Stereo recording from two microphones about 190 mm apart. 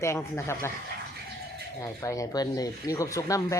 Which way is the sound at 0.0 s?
15° left (ahead or behind).